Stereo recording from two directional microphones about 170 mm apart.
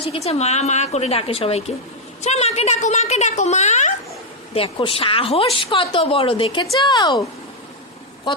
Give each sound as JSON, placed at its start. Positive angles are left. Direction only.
{"t": 0.3, "sound": "a woman's voice", "side_deg": 40}
{"t": 4.5, "sound": "a woman's voice", "side_deg": 35}